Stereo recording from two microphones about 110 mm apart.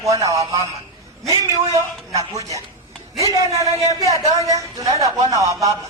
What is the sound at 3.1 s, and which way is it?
Speech, 30° right (ahead or behind).